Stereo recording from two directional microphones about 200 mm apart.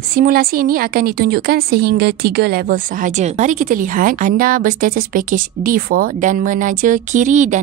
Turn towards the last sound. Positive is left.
turn(degrees=-35)  # may be behind; listen again after turning